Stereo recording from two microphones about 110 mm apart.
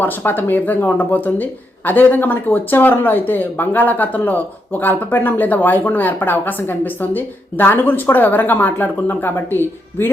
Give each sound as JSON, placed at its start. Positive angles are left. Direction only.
{"t": 0.0, "sound": "speech", "side_deg": 15}